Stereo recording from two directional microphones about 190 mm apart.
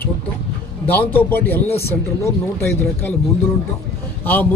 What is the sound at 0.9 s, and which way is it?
A man's voice, 10° left (ahead or behind).